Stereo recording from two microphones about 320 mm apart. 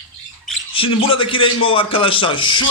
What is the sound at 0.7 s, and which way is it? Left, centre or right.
A man's voice, centre.